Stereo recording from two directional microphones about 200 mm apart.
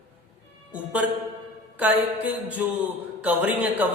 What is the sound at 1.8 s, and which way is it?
Speech, 5° right (ahead or behind).